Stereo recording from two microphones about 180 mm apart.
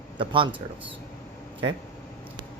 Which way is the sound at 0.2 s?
30° right (ahead or behind).